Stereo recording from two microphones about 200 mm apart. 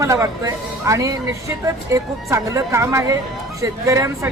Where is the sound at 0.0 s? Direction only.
15° right (ahead or behind).